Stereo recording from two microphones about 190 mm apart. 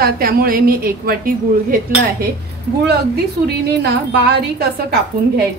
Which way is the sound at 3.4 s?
55° right (ahead or behind).